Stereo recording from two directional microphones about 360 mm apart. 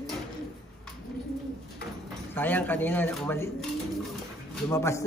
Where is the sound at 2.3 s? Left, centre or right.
Centre.